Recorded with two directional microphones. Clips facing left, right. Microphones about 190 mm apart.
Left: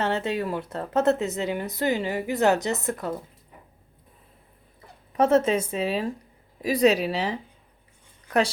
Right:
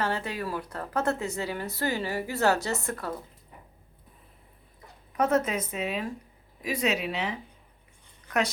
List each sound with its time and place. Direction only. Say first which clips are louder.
0.0 s a woman's voice: left 5 dB; 25° left (ahead or behind)
5.1 s a woman's voice: left 5 dB; 30° left (ahead or behind)